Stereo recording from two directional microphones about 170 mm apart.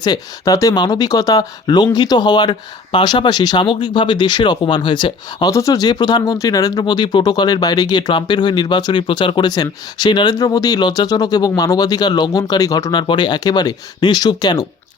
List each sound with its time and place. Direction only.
0.0 s speech: 20° left (ahead or behind)